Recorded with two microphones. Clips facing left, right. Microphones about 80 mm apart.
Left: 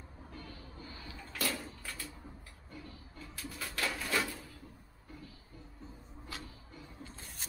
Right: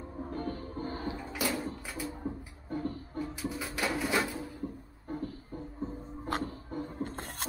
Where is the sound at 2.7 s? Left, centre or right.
Right.